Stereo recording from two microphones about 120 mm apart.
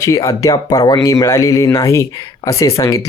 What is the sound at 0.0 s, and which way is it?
Speech, 30° left (ahead or behind).